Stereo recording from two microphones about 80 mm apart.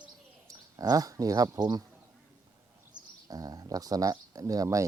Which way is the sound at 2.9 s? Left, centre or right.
Right.